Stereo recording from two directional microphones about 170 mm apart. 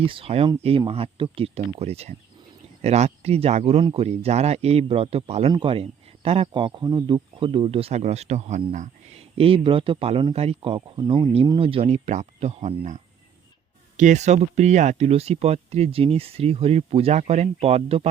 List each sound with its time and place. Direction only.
0.0 s speech: 30° right (ahead or behind)
8.7 s a sound: 45° right (ahead or behind)
9.4 s speech: 30° right (ahead or behind)